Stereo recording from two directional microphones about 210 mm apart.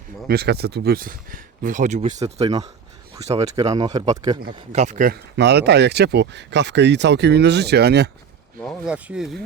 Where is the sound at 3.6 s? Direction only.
15° right (ahead or behind); by 8.1 s 50° right (ahead or behind).